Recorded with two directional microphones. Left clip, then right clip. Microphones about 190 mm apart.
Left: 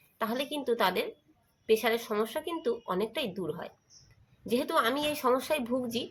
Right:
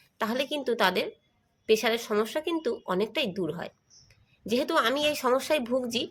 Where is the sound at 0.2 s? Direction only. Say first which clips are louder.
Right 3 dB; 35° right (ahead or behind).